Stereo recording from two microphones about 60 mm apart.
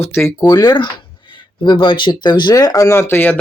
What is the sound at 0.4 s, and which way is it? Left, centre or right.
Speech, left.